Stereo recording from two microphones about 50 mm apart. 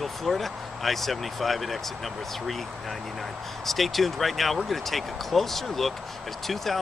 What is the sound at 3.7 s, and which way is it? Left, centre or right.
Speech, centre.